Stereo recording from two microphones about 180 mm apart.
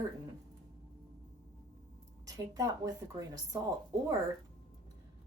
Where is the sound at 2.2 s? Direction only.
20° right (ahead or behind).